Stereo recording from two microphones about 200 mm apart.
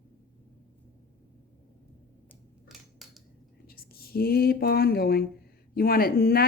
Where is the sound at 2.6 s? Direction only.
Centre (ahead or behind).